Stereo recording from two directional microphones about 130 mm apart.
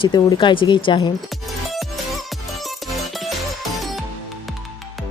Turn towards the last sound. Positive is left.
turn(degrees=0)  # may be behind; listen again after turning